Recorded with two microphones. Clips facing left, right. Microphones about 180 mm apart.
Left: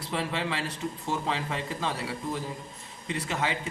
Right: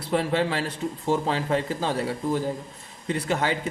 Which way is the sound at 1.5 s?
45° right (ahead or behind).